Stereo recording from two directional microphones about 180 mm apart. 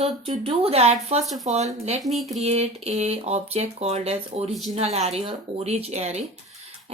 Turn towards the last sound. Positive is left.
turn(degrees=-40)  # may be behind; listen again after turning